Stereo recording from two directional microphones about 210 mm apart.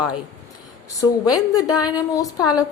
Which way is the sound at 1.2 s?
15° left (ahead or behind).